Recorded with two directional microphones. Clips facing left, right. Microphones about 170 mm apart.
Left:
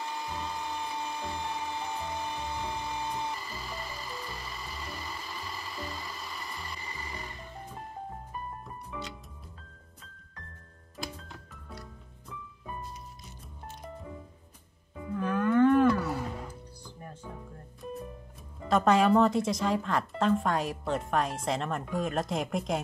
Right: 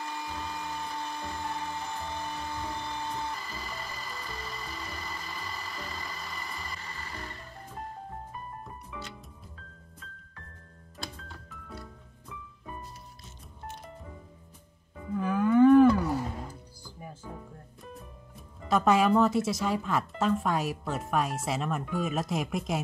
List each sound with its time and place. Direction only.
0.0 s music: 15° left (ahead or behind); by 6.8 s centre (ahead or behind)
6.8 s music: 10° left (ahead or behind)
11.2 s music: centre (ahead or behind)
15.1 s cattle: 10° right (ahead or behind)
16.8 s music: 5° right (ahead or behind)
18.7 s speech: 5° right (ahead or behind)